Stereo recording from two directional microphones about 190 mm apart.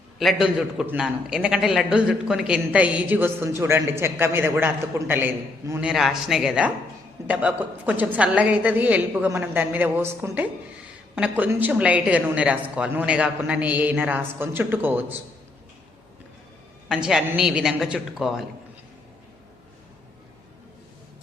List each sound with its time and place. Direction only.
0.2 s a man's voice: centre (ahead or behind)
16.9 s a man's voice: 5° right (ahead or behind)